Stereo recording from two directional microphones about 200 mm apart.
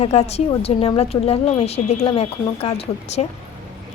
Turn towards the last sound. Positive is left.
turn(degrees=30)  # may be behind; listen again after turning